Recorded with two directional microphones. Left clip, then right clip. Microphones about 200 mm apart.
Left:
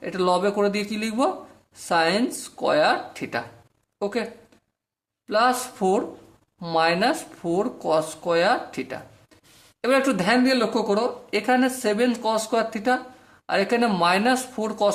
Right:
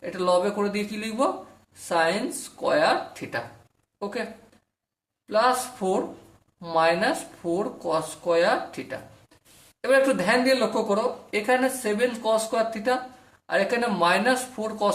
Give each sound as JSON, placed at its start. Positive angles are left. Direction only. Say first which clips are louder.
{"t": 0.0, "sound": "speech", "louder": "left 1 dB", "side_deg": 40}
{"t": 5.3, "sound": "speech", "louder": "left 1 dB", "side_deg": 40}